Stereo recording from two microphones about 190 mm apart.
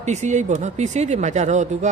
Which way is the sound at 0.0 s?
35° right (ahead or behind).